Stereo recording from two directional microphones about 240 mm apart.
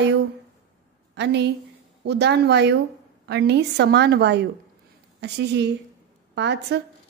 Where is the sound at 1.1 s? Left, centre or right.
Right.